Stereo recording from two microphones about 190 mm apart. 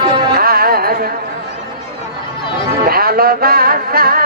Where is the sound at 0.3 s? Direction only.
50° right (ahead or behind).